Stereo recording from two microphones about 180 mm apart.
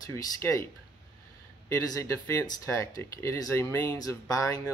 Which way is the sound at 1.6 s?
20° left (ahead or behind).